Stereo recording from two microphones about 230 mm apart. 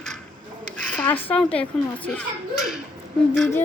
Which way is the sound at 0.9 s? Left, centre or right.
Centre.